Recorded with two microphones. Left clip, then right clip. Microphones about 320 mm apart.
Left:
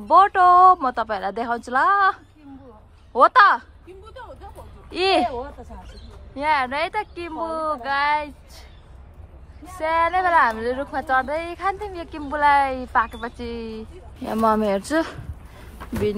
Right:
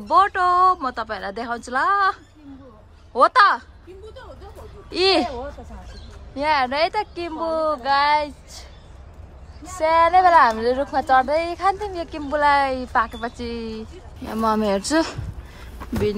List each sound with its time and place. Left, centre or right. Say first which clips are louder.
0.1 s speech: left 3 dB; centre
4.9 s speech: right 1 dB; centre
6.3 s speech: right 1 dB; centre
9.8 s speech: right 5 dB; centre